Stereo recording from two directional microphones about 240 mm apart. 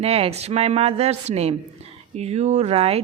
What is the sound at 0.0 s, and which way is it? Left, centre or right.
Speech, right.